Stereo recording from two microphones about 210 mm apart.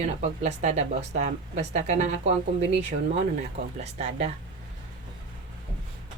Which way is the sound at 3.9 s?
30° right (ahead or behind).